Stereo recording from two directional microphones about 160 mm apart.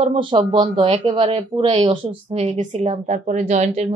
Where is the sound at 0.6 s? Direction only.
40° right (ahead or behind).